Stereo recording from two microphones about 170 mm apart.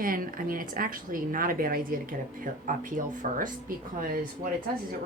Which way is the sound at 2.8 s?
50° right (ahead or behind).